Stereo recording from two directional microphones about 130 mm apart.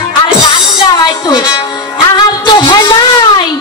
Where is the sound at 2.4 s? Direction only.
35° left (ahead or behind).